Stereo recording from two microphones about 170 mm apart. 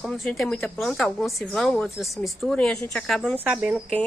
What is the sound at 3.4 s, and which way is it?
Speech, 10° right (ahead or behind).